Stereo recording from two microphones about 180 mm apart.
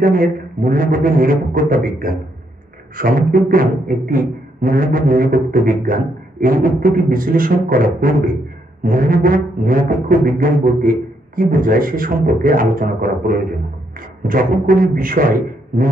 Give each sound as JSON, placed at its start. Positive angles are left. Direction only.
{"t": 0.0, "sound": "speech", "side_deg": -50}